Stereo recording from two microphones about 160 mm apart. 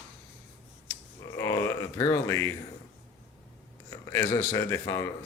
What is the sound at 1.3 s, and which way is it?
Grunt, 20° left (ahead or behind).